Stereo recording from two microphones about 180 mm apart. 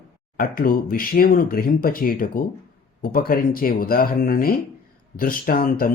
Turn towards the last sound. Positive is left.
turn(degrees=50)  # may be behind; listen again after turning